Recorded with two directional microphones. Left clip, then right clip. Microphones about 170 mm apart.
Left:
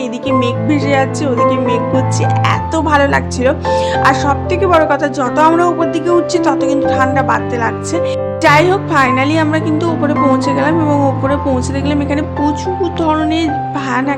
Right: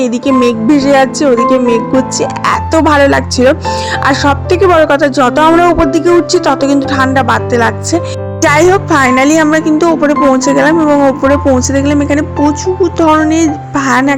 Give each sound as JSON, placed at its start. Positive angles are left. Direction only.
{"t": 0.0, "sound": "speech", "side_deg": -45}
{"t": 11.7, "sound": "speech", "side_deg": -40}